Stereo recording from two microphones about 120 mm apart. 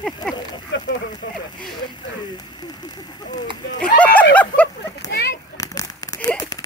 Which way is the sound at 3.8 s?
10° left (ahead or behind).